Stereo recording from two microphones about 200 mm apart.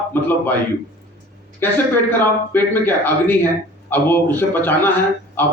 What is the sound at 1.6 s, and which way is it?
A man's voice, 10° left (ahead or behind).